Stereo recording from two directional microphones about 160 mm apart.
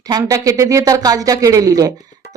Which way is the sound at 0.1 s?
20° right (ahead or behind).